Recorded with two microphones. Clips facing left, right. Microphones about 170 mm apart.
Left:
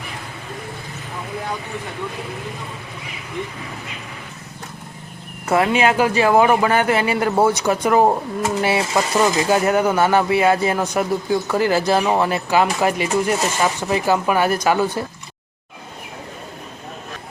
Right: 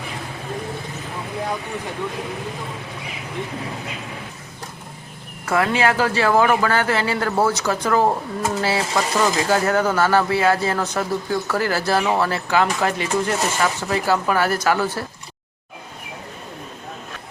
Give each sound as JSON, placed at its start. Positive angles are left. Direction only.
{"t": 5.5, "sound": "speech", "side_deg": 20}